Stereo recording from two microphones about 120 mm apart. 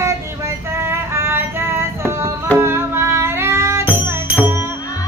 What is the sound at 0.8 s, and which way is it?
Music, 20° right (ahead or behind).